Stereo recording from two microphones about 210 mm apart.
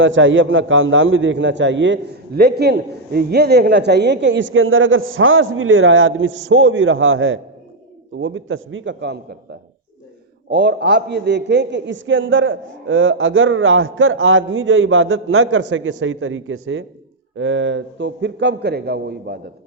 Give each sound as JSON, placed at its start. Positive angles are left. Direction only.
{"t": 0.0, "sound": "a man's voice", "side_deg": -65}